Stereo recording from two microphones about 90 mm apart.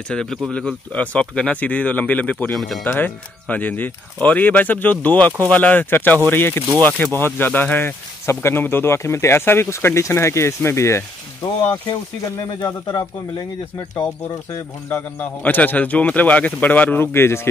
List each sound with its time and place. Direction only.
0.1 s speech: 5° left (ahead or behind); by 11.1 s 30° left (ahead or behind)
12.5 s speech: 50° left (ahead or behind)
14.9 s speech: 20° left (ahead or behind)